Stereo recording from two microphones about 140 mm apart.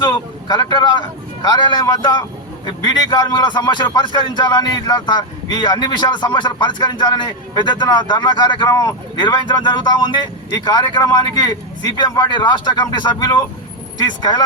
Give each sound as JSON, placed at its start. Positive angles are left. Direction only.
{"t": 0.0, "sound": "a man's voice", "side_deg": 30}